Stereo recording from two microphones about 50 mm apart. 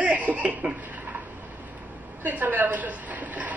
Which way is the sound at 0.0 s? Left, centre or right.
Right.